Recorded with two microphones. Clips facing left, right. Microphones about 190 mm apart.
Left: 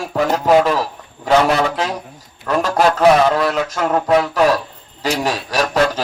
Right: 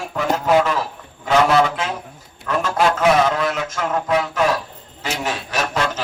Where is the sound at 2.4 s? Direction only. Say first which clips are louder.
Left 3 dB; 40° left (ahead or behind).